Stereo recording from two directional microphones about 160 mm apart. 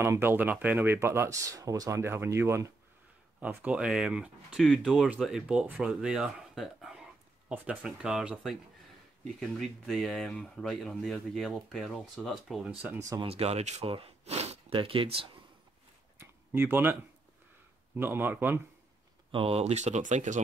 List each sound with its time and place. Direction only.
0.0 s speech: 15° right (ahead or behind)
13.3 s speech: 40° right (ahead or behind)
16.2 s a sound: 15° right (ahead or behind)
17.9 s speech: 15° right (ahead or behind)
19.3 s speech: 35° right (ahead or behind)